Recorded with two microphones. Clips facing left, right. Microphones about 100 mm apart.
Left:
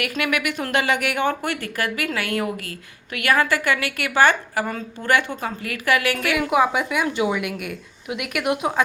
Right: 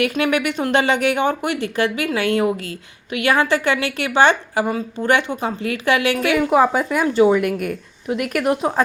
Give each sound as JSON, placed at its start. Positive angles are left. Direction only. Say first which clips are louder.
{"t": 0.0, "sound": "speech", "louder": "right 5 dB", "side_deg": -25}